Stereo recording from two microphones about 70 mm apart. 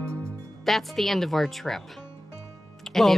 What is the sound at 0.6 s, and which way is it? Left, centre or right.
Speech, centre.